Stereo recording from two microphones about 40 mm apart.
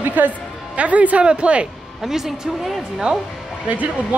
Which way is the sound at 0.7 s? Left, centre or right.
Right.